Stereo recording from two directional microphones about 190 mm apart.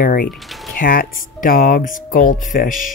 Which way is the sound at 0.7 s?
45° left (ahead or behind).